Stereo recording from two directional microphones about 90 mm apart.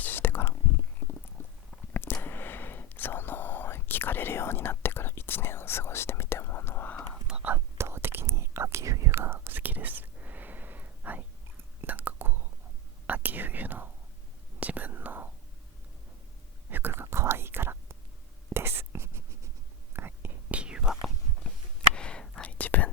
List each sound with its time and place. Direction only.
0.0 s whispering: 20° left (ahead or behind)
1.9 s a sound: 25° left (ahead or behind)
2.2 s whispering: 20° left (ahead or behind)
7.3 s whispering: 10° right (ahead or behind)
7.5 s whispering: 30° right (ahead or behind)
16.6 s whispering: 20° right (ahead or behind); by 21.1 s 5° right (ahead or behind)
21.5 s a sound: 10° left (ahead or behind)
21.9 s whispering: 10° left (ahead or behind)